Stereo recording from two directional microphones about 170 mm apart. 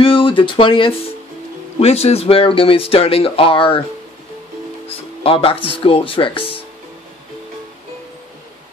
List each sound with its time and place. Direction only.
0.0 s speech: 30° left (ahead or behind)
5.2 s speech: 35° left (ahead or behind)